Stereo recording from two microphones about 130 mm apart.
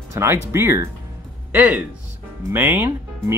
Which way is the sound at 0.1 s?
20° right (ahead or behind).